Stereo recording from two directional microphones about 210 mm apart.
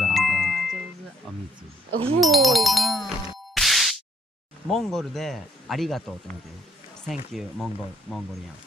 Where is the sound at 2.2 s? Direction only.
Centre (ahead or behind).